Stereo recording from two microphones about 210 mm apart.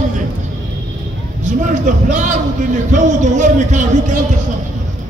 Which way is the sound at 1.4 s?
35° right (ahead or behind).